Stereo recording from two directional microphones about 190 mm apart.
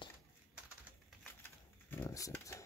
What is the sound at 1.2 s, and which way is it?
Shuffling cards, 10° left (ahead or behind).